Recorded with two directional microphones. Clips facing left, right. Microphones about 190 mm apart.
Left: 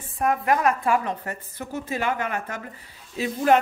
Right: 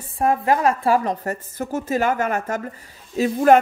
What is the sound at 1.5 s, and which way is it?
Speech, 45° right (ahead or behind).